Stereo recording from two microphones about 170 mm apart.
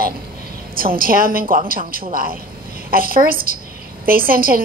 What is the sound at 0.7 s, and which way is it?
A woman's voice, 60° right (ahead or behind).